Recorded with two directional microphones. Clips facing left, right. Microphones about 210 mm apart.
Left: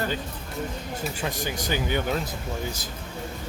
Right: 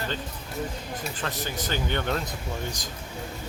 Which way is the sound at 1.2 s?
15° left (ahead or behind).